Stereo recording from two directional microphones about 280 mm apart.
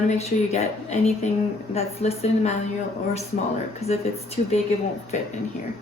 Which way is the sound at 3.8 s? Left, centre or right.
Centre.